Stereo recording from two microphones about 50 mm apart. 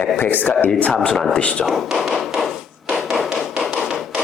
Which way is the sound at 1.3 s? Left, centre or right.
Left.